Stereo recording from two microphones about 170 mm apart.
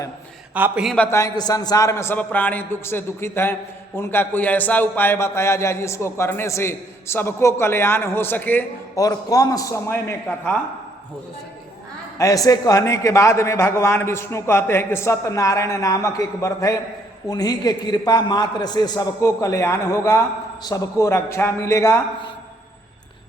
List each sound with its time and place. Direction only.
0.5 s a man's voice: 5° right (ahead or behind)
0.9 s a man's voice: 15° left (ahead or behind)
9.0 s a man's voice: 20° left (ahead or behind)
12.1 s a man's voice: 20° left (ahead or behind)